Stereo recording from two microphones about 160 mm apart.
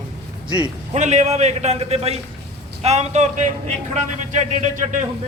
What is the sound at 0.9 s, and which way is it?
A man's voice, 45° right (ahead or behind).